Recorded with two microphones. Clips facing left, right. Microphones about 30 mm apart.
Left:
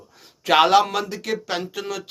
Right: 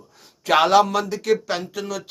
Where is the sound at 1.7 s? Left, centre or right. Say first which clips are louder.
Even; left.